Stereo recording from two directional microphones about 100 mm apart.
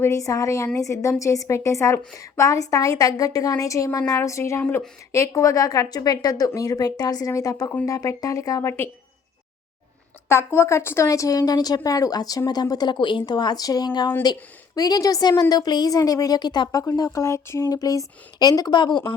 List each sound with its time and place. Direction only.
0.0 s a woman's voice: 35° left (ahead or behind)
10.2 s a woman's voice: 25° left (ahead or behind); by 19.1 s 55° left (ahead or behind)